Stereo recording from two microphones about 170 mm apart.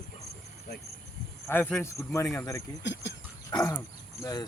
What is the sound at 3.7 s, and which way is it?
Speech, 20° left (ahead or behind).